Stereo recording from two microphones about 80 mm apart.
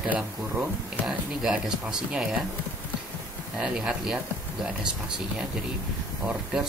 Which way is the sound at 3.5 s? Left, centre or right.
Centre.